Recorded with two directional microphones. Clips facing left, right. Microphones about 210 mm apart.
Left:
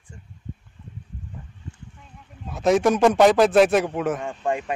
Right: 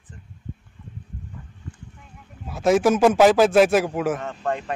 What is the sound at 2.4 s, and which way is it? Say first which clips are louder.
A man's voice: right 1 dB; centre (ahead or behind).